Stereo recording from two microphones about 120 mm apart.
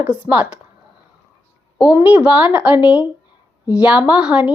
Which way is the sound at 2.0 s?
10° right (ahead or behind).